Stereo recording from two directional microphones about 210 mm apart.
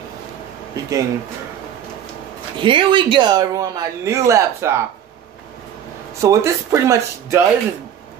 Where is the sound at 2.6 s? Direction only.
25° right (ahead or behind).